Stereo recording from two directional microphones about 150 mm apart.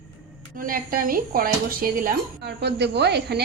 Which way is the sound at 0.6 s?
70° right (ahead or behind).